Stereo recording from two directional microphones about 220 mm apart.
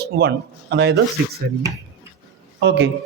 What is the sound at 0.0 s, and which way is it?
Speech, 50° right (ahead or behind).